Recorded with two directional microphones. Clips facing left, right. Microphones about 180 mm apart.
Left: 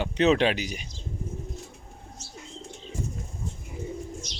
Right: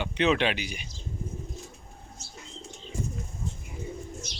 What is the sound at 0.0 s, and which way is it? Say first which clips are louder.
Speech: left 3 dB; 40° left (ahead or behind).